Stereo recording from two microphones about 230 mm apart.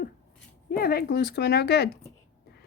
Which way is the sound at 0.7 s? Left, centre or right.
Left.